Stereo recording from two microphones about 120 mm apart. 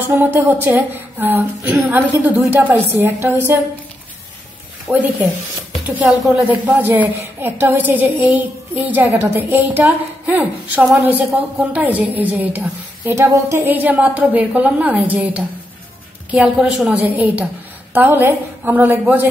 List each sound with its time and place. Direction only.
0.0 s a woman's voice: 15° right (ahead or behind)
4.8 s a woman's voice: 15° right (ahead or behind)